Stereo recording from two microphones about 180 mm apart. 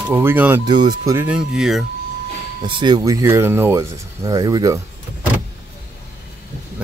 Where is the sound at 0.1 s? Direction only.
10° right (ahead or behind).